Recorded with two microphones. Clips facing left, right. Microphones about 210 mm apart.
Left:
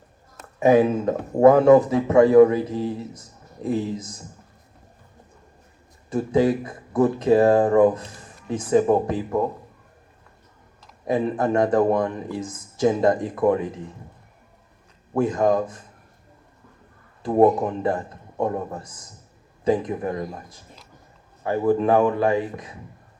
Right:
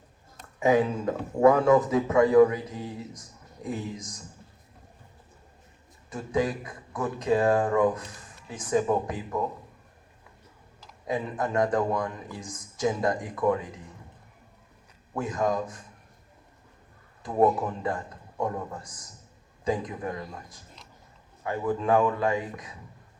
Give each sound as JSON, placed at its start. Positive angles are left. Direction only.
{"t": 1.0, "sound": "a man's voice", "side_deg": 40}
{"t": 1.5, "sound": "speech", "side_deg": 25}
{"t": 6.1, "sound": "speech", "side_deg": 25}
{"t": 11.0, "sound": "speech", "side_deg": 25}
{"t": 15.2, "sound": "speech", "side_deg": 25}
{"t": 17.2, "sound": "speech", "side_deg": 25}
{"t": 20.0, "sound": "a man's voice", "side_deg": 40}
{"t": 20.4, "sound": "speech", "side_deg": 25}